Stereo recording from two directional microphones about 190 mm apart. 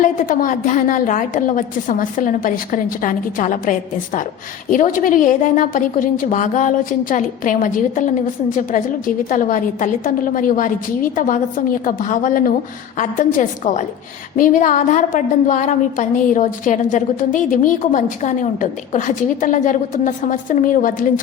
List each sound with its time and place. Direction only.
0.0 s a woman's voice: 45° left (ahead or behind)